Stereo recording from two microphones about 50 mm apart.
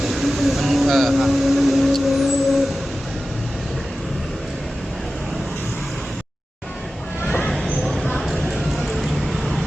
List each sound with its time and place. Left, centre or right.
0.0 s vehicle: centre
7.3 s vehicle: left
7.5 s a sound: centre